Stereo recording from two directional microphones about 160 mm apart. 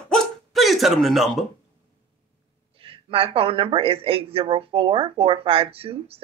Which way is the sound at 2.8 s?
35° right (ahead or behind).